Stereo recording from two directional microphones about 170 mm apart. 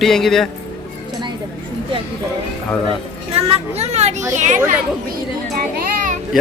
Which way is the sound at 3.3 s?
35° right (ahead or behind).